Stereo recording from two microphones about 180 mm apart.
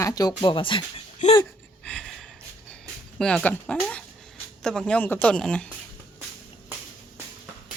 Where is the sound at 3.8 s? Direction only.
5° left (ahead or behind).